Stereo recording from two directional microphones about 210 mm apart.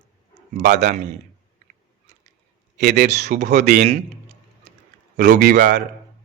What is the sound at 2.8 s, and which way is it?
Speech, 50° right (ahead or behind).